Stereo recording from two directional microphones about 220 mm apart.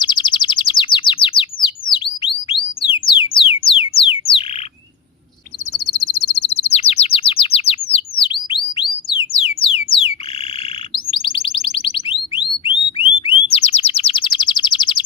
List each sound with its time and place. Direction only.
0.0 s bird: 20° left (ahead or behind)
5.8 s bird: 25° left (ahead or behind)
9.7 s a sound: 25° left (ahead or behind)
10.9 s alarm: 25° left (ahead or behind)
13.0 s bird: 25° left (ahead or behind)